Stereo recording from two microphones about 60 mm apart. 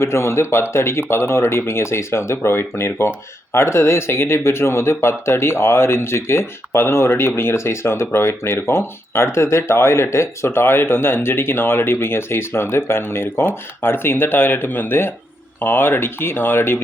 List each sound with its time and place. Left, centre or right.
0.0 s speech: left